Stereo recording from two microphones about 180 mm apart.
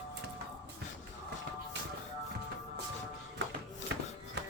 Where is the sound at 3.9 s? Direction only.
80° right.